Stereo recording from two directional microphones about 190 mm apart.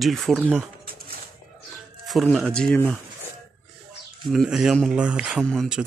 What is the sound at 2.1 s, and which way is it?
Speech, centre (ahead or behind).